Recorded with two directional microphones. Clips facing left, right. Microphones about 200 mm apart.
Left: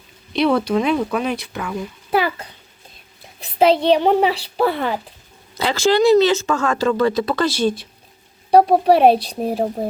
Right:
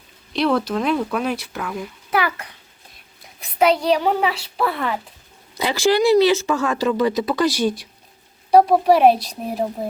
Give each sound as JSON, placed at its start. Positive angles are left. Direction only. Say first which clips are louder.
{"t": 0.3, "sound": "speech", "louder": "left 3 dB", "side_deg": 0}
{"t": 2.0, "sound": "a child's voice", "louder": "left 3 dB", "side_deg": 25}
{"t": 5.5, "sound": "speech", "louder": "left 1 dB", "side_deg": -15}
{"t": 8.6, "sound": "a child's voice", "louder": "left 1 dB", "side_deg": 30}